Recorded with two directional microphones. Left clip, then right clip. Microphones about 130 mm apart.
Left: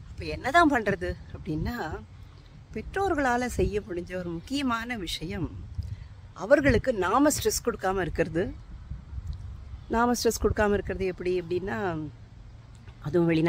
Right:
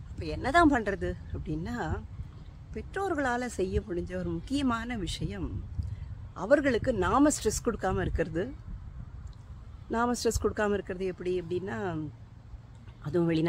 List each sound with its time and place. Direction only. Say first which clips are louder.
0.2 s speech: left 2 dB; 35° left (ahead or behind)
9.8 s speech: left 4 dB; 40° left (ahead or behind)
10.4 s speech: left 4 dB; 30° left (ahead or behind); by 12.0 s 55° left (ahead or behind)